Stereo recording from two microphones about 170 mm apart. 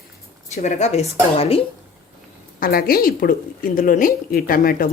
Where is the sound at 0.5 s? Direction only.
45° left (ahead or behind).